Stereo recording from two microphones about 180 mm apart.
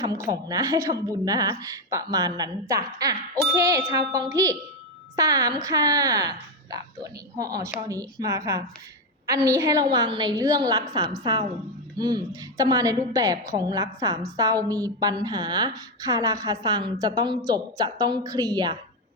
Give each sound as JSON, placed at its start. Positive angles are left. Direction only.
{"t": 0.0, "sound": "a woman's voice", "side_deg": -20}